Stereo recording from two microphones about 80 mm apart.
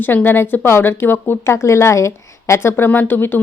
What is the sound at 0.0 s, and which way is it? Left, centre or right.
A woman's voice, left.